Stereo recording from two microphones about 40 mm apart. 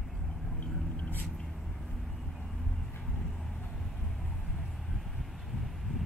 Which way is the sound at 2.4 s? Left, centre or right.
Centre.